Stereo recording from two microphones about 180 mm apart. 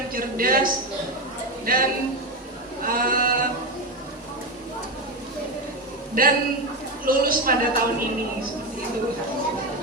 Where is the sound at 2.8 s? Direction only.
50° right (ahead or behind).